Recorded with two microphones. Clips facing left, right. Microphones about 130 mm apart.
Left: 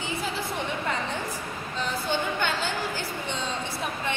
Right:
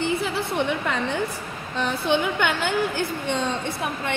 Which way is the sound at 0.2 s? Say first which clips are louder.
Right 6 dB; 70° right (ahead or behind).